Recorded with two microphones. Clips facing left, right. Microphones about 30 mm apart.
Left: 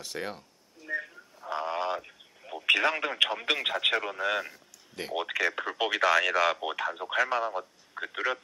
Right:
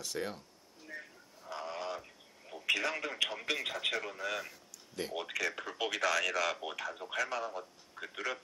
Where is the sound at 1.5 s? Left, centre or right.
Left.